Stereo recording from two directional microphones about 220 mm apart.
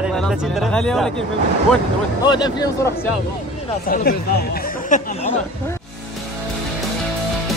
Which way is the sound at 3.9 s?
45° left (ahead or behind).